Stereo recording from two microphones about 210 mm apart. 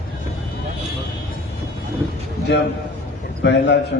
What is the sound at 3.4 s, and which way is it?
Speech, 55° left (ahead or behind).